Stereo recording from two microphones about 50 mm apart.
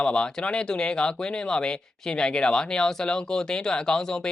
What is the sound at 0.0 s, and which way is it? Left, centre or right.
Speech, left.